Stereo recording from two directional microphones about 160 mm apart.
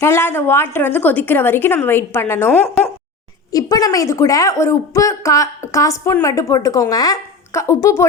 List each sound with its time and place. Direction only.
0.0 s a woman's voice: 15° left (ahead or behind)